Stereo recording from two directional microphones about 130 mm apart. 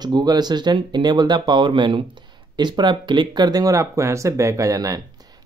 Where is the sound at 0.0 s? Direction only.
30° right (ahead or behind).